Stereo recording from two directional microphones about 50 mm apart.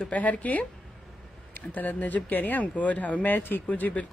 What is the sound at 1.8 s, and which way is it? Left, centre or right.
Speech, left.